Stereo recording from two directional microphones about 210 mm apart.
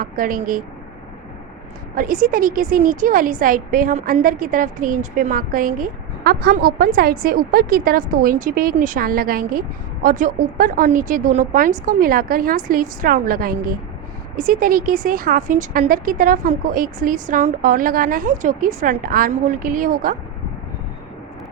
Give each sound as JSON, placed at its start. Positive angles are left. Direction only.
{"t": 0.0, "sound": "a woman's voice", "side_deg": -40}
{"t": 2.0, "sound": "a woman's voice", "side_deg": -40}